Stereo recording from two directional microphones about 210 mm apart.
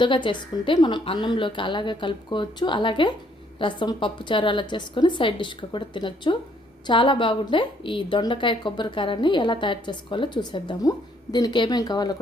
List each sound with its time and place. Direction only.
0.0 s a woman's voice: 25° left (ahead or behind)